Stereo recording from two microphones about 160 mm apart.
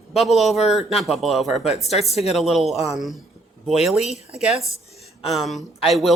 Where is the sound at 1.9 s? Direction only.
40° left (ahead or behind).